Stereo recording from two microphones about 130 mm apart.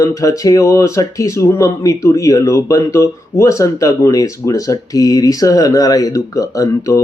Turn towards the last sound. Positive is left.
turn(degrees=25)  # may be behind; listen again after turning